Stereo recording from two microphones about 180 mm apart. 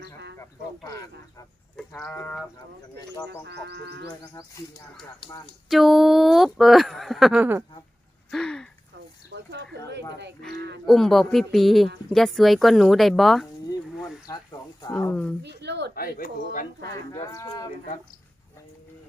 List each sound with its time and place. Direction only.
0.9 s speech: 20° left (ahead or behind)
1.7 s livestock: 5° left (ahead or behind)
3.4 s frog: 70° right (ahead or behind)
5.6 s speech: centre (ahead or behind)
8.3 s speech: 5° left (ahead or behind)
9.3 s speech: 70° right (ahead or behind)
10.8 s speech: centre (ahead or behind)
14.3 s speech: 15° left (ahead or behind)
15.4 s speech: 70° right (ahead or behind)
16.0 s speech: 55° left (ahead or behind)
17.1 s speech: 20° left (ahead or behind)